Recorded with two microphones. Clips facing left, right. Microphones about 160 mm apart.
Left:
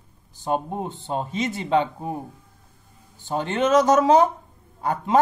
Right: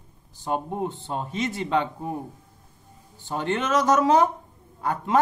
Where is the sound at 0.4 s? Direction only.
20° left (ahead or behind).